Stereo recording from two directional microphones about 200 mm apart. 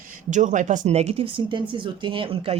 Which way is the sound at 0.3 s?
40° right (ahead or behind).